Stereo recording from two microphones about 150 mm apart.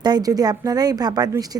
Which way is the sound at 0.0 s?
25° right (ahead or behind).